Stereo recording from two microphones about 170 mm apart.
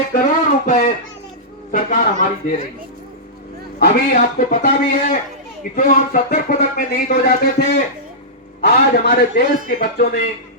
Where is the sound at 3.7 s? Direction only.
60° left (ahead or behind).